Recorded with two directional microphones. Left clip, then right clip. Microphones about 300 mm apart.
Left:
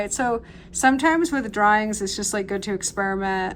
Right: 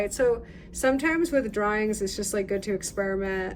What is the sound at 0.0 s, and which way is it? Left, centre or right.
Speech, centre.